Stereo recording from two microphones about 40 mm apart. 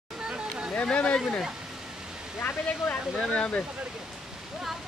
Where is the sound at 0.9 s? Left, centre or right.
Left.